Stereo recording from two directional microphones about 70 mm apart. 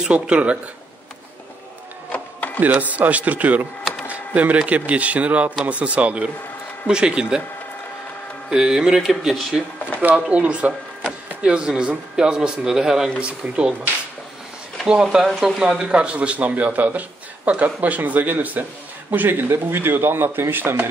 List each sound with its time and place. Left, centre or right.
0.0 s speech: centre
2.1 s printer: left
2.6 s speech: right
8.5 s speech: centre
10.3 s speech: centre
14.9 s speech: centre; by 20.9 s right